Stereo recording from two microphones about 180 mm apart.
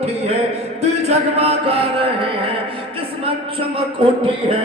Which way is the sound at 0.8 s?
35° right (ahead or behind).